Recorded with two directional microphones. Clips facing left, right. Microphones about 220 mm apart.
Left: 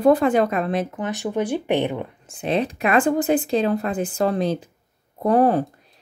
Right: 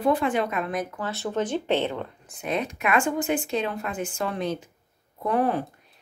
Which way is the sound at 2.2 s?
30° left (ahead or behind).